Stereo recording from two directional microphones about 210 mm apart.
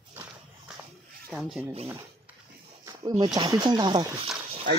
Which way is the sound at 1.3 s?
5° right (ahead or behind).